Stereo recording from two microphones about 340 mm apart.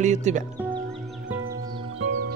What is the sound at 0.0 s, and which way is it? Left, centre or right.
Speech, right.